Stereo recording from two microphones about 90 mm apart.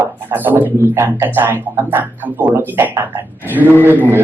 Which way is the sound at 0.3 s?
20° right (ahead or behind).